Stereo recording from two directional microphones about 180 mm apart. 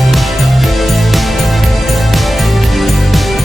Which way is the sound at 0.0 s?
Centre (ahead or behind).